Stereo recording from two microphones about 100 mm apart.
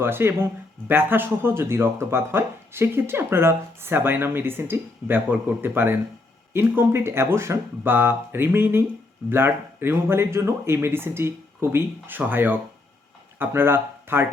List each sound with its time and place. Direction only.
0.0 s speech: 25° right (ahead or behind)